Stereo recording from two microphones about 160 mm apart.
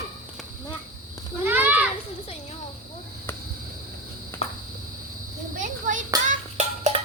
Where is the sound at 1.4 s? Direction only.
10° right (ahead or behind).